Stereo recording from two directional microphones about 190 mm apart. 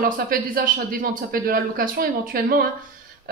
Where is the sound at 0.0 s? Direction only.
50° right (ahead or behind).